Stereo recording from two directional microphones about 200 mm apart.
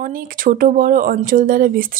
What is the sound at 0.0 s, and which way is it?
Speech, 45° right (ahead or behind).